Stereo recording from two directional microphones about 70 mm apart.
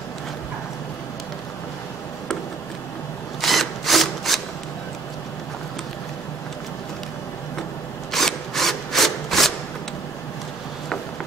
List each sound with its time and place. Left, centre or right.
3.3 s wood: centre
8.1 s wood: centre